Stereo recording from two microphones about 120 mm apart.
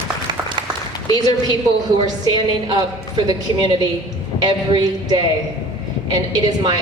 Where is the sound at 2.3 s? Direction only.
40° right (ahead or behind).